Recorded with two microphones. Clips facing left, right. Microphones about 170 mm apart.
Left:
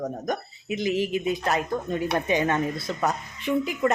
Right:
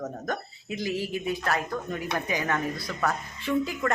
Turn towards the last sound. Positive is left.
turn(degrees=20)  # may be behind; listen again after turning